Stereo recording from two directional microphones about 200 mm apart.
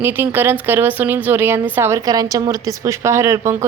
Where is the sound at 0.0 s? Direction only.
10° right (ahead or behind).